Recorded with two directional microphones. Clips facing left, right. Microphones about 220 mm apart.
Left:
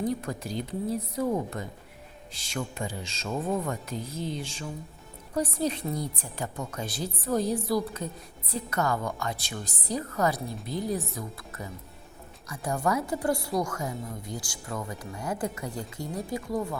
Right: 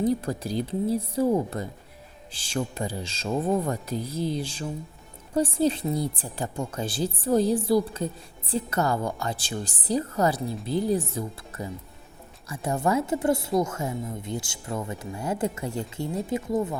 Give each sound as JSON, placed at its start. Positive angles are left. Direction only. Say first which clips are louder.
{"t": 0.0, "sound": "a woman's voice", "louder": "right 5 dB", "side_deg": -35}